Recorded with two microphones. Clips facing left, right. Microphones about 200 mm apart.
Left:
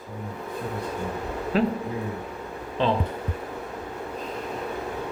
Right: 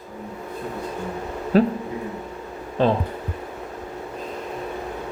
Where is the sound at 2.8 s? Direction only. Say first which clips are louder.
Right 4 dB; 45° right (ahead or behind).